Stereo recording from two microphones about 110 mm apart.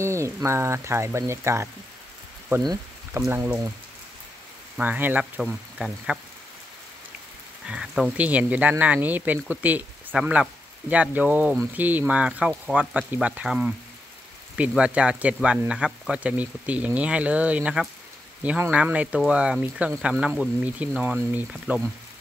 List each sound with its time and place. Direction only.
0.0 s speech: 25° right (ahead or behind)
3.1 s speech: 20° right (ahead or behind)
4.7 s speech: 15° right (ahead or behind)
7.6 s speech: 5° right (ahead or behind)
14.8 s speech: 10° right (ahead or behind)